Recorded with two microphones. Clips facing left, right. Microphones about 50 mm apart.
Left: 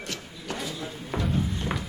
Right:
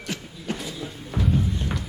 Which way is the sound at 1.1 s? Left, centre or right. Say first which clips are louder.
Right 2 dB; centre.